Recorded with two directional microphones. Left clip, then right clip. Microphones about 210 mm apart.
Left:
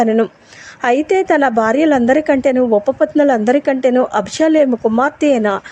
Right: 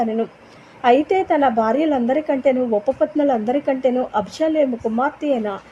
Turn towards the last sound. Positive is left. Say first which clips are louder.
# left 8 dB
turn(degrees=25)  # may be behind; listen again after turning